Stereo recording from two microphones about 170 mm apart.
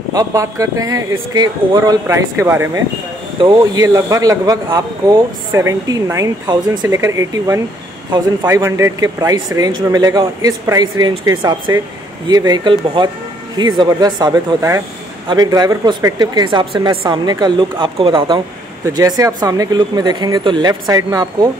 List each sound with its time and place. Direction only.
0.1 s speech: 20° right (ahead or behind)